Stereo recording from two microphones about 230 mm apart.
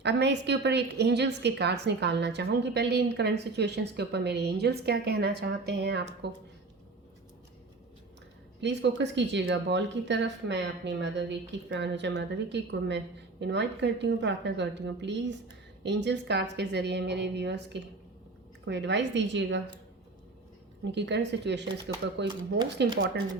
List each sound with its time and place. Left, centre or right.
0.0 s a woman's voice: right
8.6 s a woman's voice: right
20.9 s a woman's voice: right